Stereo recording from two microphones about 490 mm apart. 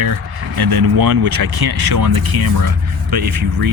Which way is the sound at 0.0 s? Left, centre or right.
Right.